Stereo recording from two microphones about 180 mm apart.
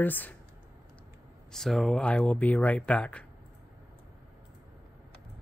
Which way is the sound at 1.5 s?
Centre (ahead or behind).